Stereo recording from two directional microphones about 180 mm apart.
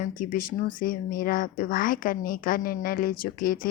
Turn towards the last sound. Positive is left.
turn(degrees=50)  # may be behind; listen again after turning